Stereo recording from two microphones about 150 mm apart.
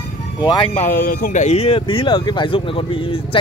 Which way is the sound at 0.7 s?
65° left (ahead or behind).